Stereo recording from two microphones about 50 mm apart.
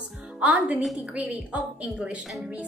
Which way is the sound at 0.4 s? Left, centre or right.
Right.